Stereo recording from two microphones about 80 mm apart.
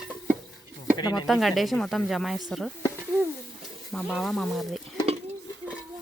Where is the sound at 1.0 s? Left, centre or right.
Left.